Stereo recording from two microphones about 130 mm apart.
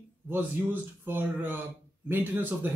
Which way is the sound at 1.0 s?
15° right (ahead or behind).